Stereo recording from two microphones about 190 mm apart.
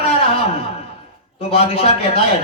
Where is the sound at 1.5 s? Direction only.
30° left (ahead or behind).